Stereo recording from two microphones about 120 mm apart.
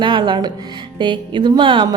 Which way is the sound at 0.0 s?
40° right (ahead or behind).